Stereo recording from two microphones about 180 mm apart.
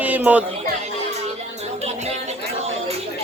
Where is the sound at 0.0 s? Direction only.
10° right (ahead or behind).